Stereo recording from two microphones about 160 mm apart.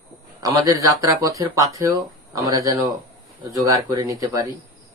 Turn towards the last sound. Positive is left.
turn(degrees=-20)  # may be behind; listen again after turning